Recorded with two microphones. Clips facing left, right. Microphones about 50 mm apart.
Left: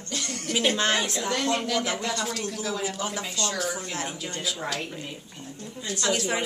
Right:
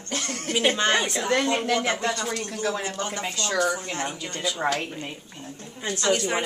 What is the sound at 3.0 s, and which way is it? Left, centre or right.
A woman's voice, centre.